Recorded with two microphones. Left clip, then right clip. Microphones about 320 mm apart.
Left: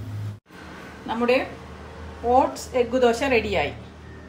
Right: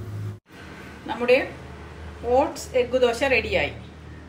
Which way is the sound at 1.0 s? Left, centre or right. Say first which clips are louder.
Right 1 dB; left.